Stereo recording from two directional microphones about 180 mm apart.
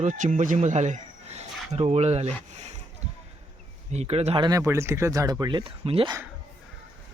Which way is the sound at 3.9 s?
35° right (ahead or behind).